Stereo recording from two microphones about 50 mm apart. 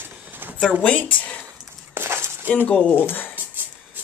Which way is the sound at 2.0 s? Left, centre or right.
Right.